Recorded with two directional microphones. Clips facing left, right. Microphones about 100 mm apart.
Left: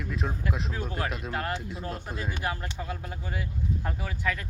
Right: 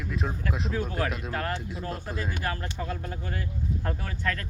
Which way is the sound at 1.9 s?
Centre (ahead or behind).